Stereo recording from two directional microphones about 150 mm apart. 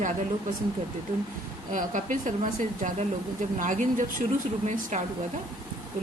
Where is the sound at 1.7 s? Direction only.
60° right (ahead or behind).